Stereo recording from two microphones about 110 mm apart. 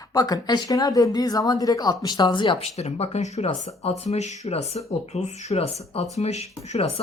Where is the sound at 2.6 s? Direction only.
75° left (ahead or behind).